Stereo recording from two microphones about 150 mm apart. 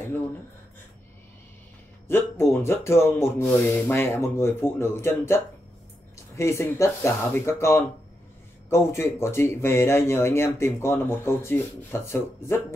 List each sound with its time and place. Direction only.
2.0 s speech: 15° left (ahead or behind)